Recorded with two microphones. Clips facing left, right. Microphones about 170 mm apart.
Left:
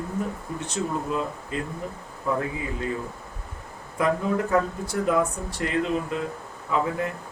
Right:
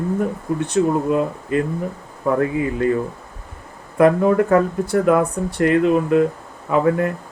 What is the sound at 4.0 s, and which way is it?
Speech, 60° right (ahead or behind).